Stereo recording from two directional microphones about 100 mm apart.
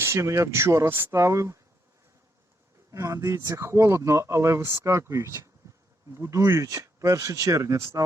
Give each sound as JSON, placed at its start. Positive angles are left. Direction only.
{"t": 0.0, "sound": "speech", "side_deg": -30}
{"t": 2.9, "sound": "speech", "side_deg": -30}